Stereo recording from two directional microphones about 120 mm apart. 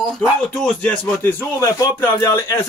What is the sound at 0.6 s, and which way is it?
Speech, 15° left (ahead or behind).